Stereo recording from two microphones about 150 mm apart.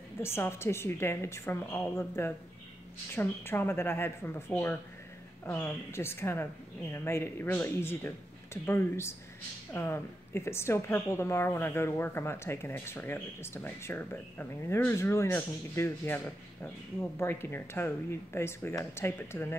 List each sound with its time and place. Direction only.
0.2 s a woman's voice: 15° left (ahead or behind)